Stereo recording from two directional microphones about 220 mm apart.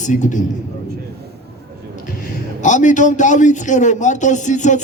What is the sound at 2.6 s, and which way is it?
A man's voice, 35° left (ahead or behind).